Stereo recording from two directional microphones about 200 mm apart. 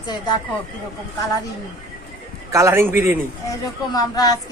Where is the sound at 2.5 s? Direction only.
15° right (ahead or behind).